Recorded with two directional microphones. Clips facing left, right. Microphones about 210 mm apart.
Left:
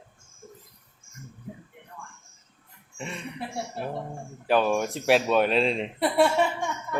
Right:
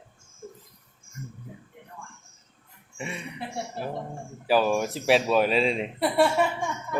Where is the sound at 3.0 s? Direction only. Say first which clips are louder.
Even; 10° right (ahead or behind).